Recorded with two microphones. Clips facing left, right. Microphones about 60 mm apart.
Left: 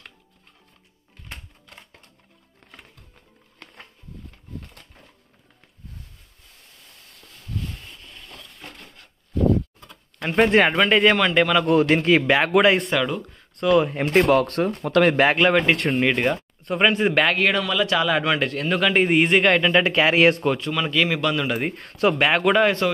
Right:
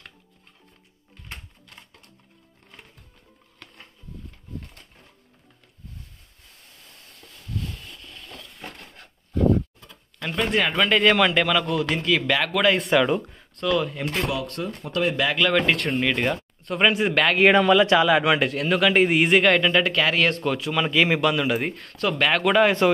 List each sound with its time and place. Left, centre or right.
9.8 s a sound: left
10.3 s speech: left
10.8 s a man's voice: centre
11.6 s a man's voice: left
12.7 s a man's voice: centre
13.7 s a man's voice: left
14.3 s speech: left
15.1 s speech: left
15.5 s a man's voice: centre
17.4 s speech: right
17.9 s a man's voice: centre
20.4 s a man's voice: centre
20.7 s a man's voice: centre
21.7 s a man's voice: centre